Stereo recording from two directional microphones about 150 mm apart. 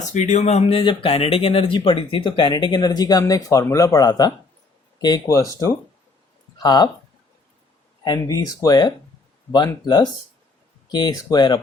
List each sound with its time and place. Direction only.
0.1 s speech: 50° left (ahead or behind); by 6.9 s 25° left (ahead or behind)
8.0 s speech: 25° left (ahead or behind)